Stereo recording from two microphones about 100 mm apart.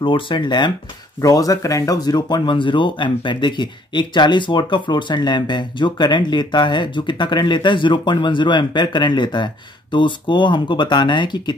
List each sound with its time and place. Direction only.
0.0 s speech: 55° left (ahead or behind)
1.2 s speech: 35° left (ahead or behind)